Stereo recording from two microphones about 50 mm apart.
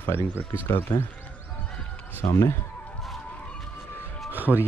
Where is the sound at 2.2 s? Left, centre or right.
Left.